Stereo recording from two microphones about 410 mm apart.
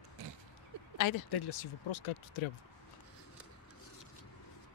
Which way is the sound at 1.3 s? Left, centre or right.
Left.